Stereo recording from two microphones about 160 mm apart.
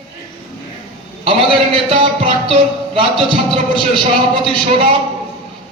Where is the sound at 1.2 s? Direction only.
35° right (ahead or behind).